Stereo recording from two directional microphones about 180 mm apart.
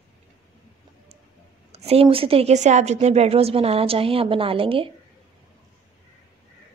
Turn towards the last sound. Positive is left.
turn(degrees=-30)  # may be behind; listen again after turning